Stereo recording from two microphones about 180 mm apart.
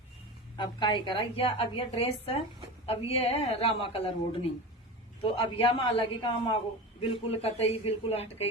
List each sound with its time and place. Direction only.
0.5 s a woman's voice: 25° left (ahead or behind)